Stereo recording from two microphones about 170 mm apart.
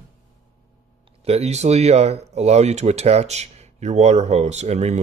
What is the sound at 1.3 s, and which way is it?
Speech, 40° right (ahead or behind).